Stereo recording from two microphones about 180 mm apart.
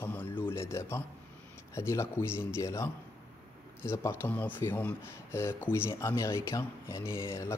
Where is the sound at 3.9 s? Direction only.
15° left (ahead or behind).